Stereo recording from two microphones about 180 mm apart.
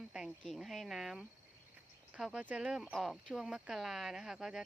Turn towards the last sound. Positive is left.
turn(degrees=0)  # may be behind; listen again after turning